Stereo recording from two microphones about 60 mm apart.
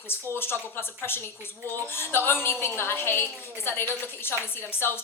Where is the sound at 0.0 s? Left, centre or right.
Left.